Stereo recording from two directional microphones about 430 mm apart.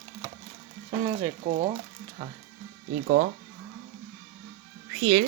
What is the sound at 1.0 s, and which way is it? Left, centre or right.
Speech, centre.